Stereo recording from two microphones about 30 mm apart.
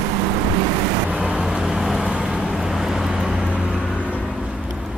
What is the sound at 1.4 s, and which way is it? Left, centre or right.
Vehicle, centre.